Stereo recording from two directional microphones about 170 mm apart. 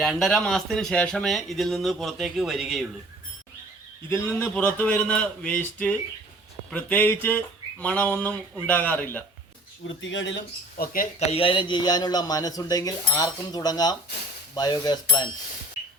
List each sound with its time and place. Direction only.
0.0 s speech: 5° left (ahead or behind)
4.1 s a man's voice: 10° left (ahead or behind)
9.8 s speech: 90° left
11.3 s speech: 35° left (ahead or behind)